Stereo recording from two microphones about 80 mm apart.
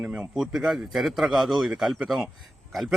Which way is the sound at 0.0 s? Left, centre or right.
Centre.